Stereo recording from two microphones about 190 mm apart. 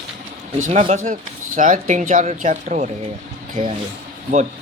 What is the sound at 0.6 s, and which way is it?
Speech, 35° right (ahead or behind).